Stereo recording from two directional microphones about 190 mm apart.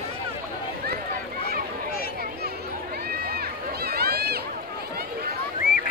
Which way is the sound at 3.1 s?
55° right (ahead or behind).